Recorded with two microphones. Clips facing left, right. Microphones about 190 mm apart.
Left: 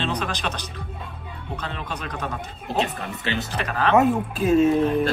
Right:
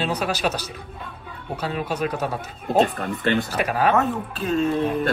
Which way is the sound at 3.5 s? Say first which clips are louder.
Right 2 dB; 10° right (ahead or behind).